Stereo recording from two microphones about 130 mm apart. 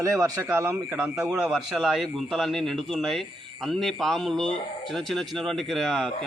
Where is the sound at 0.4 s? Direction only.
20° right (ahead or behind).